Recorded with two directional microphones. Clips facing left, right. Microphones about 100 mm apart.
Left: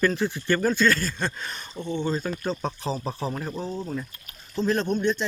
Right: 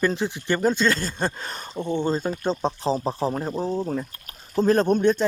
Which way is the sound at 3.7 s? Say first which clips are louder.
Right 5 dB; 45° right (ahead or behind).